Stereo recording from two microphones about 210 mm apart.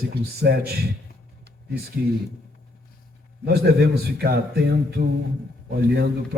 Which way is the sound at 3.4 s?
50° right (ahead or behind).